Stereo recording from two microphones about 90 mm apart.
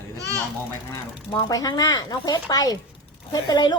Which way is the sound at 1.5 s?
45° left (ahead or behind).